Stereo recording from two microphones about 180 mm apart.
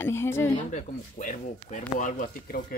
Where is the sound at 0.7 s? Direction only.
45° left (ahead or behind).